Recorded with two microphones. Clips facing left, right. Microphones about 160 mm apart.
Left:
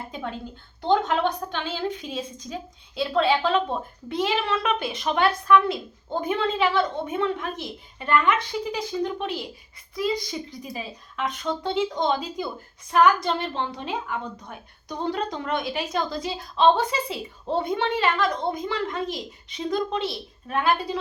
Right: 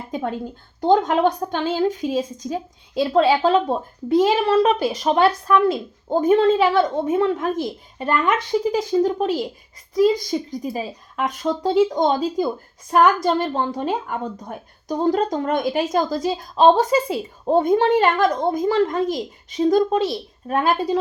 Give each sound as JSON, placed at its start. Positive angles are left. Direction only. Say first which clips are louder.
{"t": 0.1, "sound": "a woman's voice", "louder": "right 7 dB", "side_deg": -45}